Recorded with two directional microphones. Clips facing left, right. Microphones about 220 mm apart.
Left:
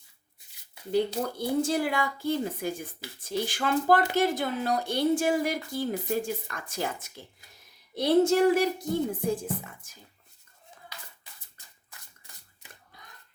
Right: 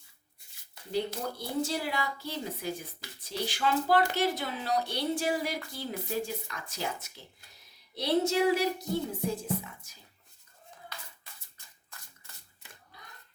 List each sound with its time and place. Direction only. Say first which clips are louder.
1.4 s a woman's voice: left 6 dB; 50° left (ahead or behind)